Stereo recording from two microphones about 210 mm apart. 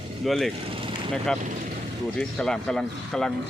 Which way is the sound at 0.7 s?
25° right (ahead or behind).